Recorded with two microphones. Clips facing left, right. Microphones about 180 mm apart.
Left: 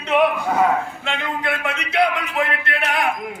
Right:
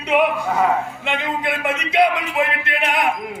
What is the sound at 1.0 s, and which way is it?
A man's voice, 15° right (ahead or behind).